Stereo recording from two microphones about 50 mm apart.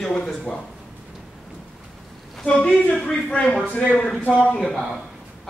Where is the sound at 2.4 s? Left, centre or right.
Left.